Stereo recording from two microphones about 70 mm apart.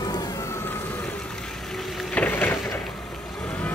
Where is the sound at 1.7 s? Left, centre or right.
Centre.